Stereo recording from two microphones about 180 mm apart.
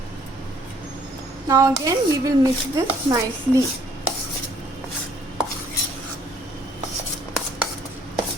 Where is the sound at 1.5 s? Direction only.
20° right (ahead or behind).